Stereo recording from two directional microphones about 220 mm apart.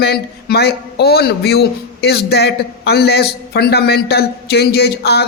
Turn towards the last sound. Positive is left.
turn(degrees=45)  # may be behind; listen again after turning